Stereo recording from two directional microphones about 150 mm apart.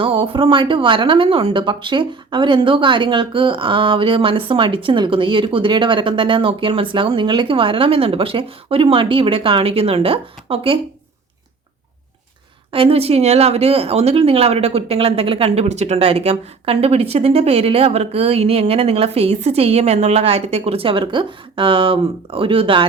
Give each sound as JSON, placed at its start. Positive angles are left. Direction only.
{"t": 0.0, "sound": "speech", "side_deg": -35}
{"t": 12.7, "sound": "speech", "side_deg": -40}